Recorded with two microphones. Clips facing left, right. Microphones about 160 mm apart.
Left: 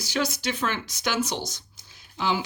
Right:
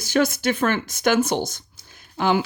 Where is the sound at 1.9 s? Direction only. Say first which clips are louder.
Right 6 dB; 55° right (ahead or behind).